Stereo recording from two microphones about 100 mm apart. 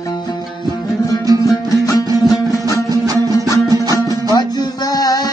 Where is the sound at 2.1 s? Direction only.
40° left (ahead or behind).